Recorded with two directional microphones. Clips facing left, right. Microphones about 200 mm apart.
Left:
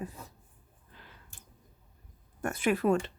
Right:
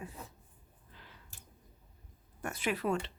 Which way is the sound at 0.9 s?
50° left (ahead or behind).